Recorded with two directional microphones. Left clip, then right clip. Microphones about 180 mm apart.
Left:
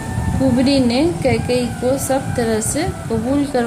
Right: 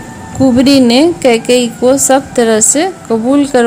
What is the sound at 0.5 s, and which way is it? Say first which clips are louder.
A woman's voice: right 9 dB; 50° right (ahead or behind).